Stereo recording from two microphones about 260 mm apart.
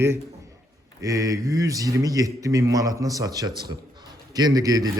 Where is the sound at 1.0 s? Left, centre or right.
Centre.